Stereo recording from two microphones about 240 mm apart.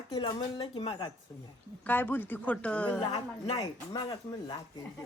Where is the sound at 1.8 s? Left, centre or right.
Centre.